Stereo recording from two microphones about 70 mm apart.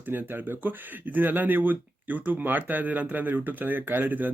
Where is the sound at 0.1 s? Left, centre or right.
Right.